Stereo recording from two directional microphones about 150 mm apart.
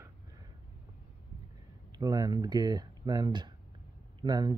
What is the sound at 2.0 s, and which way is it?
Speech, 25° right (ahead or behind).